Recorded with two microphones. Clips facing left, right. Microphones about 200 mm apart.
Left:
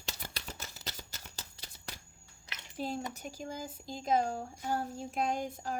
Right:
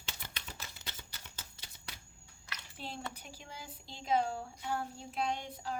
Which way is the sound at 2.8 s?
45° left (ahead or behind).